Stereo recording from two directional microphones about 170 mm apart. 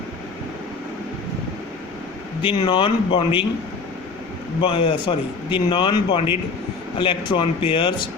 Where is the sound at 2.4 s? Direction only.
30° left (ahead or behind).